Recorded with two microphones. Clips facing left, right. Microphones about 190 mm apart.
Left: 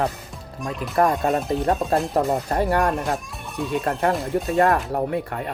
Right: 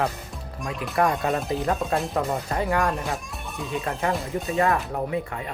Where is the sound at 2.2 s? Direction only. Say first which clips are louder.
Left 4 dB; 40° left (ahead or behind).